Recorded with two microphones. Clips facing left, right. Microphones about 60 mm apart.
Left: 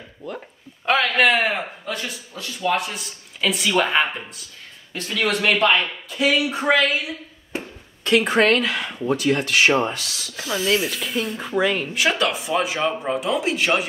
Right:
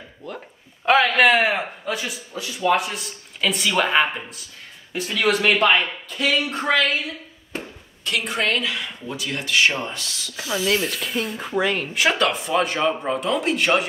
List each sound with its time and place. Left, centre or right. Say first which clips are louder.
0.8 s a man's voice: right 2 dB; centre
6.1 s a woman's voice: left 2 dB; centre
8.0 s speech: left 7 dB; left
10.3 s speech: left 1 dB; centre